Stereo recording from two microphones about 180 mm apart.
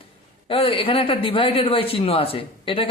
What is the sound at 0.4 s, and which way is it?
Speech, 30° left (ahead or behind).